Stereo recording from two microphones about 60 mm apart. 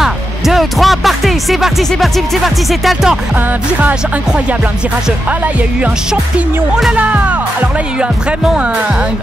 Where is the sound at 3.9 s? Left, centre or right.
Centre.